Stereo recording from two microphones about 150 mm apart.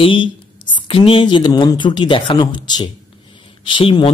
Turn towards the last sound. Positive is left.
turn(degrees=35)  # may be behind; listen again after turning